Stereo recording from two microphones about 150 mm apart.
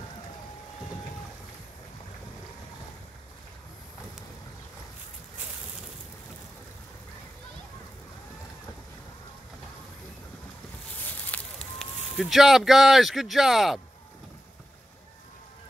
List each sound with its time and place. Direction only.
11.1 s fire: 5° left (ahead or behind)
12.2 s speech: centre (ahead or behind)